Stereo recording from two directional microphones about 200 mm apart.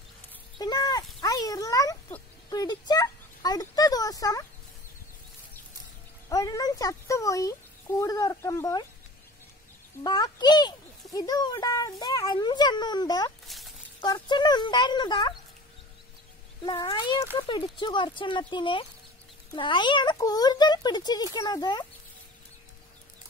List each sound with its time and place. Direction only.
0.6 s speech: 20° left (ahead or behind)
6.2 s speech: 15° left (ahead or behind)
10.0 s speech: 20° left (ahead or behind)
13.5 s a sound: centre (ahead or behind)
14.0 s speech: 20° left (ahead or behind)
16.6 s speech: 25° left (ahead or behind)